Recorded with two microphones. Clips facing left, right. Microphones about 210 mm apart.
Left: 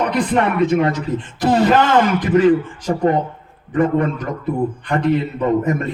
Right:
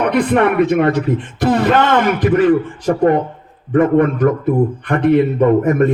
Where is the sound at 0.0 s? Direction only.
60° right (ahead or behind).